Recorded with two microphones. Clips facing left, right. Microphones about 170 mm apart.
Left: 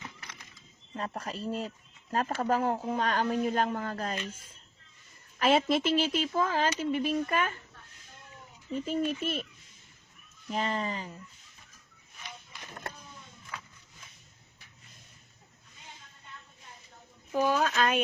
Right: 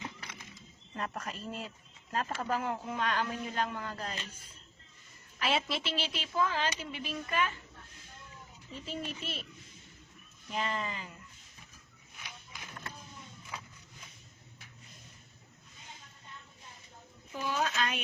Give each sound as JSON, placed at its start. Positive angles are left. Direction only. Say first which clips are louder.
{"t": 0.9, "sound": "speech", "louder": "left 3 dB", "side_deg": 30}
{"t": 5.4, "sound": "speech", "louder": "left 8 dB", "side_deg": 45}
{"t": 8.7, "sound": "speech", "louder": "left 10 dB", "side_deg": 50}
{"t": 10.5, "sound": "speech", "louder": "left 4 dB", "side_deg": 35}
{"t": 17.5, "sound": "speech", "louder": "left 2 dB", "side_deg": 50}